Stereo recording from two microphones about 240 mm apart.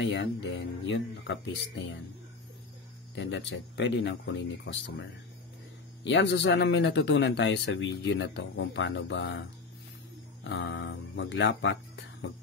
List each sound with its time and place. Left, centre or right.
0.0 s speech: left
3.2 s speech: left
6.0 s speech: left